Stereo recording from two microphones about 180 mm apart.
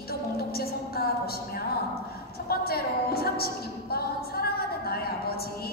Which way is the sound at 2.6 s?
60° left (ahead or behind).